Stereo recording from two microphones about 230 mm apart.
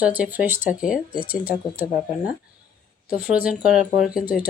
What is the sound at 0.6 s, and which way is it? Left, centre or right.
Speech, left.